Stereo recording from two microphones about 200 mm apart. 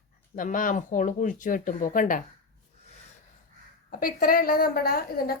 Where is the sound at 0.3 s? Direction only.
40° left (ahead or behind).